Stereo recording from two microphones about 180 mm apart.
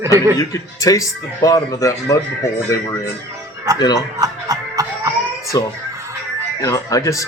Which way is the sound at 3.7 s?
20° right (ahead or behind).